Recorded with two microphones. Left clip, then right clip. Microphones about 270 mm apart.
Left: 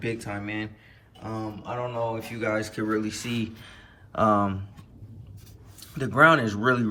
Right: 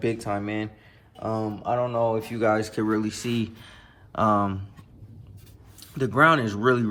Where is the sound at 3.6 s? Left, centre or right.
Right.